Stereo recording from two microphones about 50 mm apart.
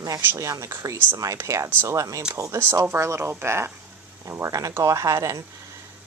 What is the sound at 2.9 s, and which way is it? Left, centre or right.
Speech, right.